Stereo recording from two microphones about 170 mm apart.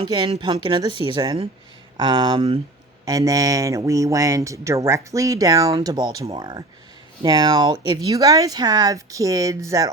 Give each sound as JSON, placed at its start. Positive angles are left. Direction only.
{"t": 0.0, "sound": "speech", "side_deg": -30}
{"t": 3.1, "sound": "speech", "side_deg": -20}